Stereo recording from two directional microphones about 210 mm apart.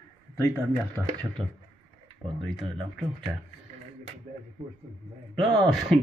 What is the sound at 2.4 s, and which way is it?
Speech, centre (ahead or behind).